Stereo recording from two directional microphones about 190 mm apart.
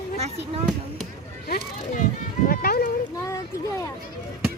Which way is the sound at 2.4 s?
50° left (ahead or behind).